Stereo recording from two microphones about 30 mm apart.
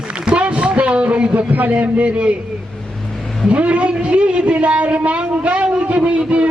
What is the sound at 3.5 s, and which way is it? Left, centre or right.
A man's voice, right.